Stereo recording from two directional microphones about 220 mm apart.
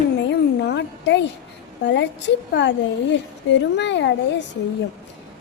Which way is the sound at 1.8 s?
55° left (ahead or behind).